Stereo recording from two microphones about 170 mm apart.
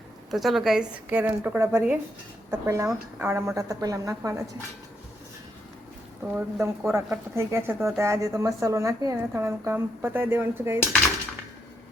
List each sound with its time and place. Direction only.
0.3 s a woman's voice: centre (ahead or behind); by 4.4 s 15° right (ahead or behind)
6.2 s a woman's voice: 15° right (ahead or behind)